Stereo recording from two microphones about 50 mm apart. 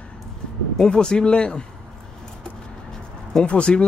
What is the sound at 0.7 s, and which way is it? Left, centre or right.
Speech, centre.